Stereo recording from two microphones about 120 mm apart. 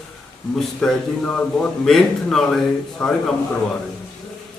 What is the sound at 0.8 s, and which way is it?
A man's voice, 5° left (ahead or behind).